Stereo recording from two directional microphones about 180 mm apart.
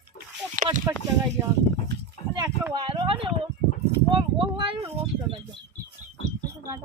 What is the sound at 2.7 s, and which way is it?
Speech, 25° right (ahead or behind).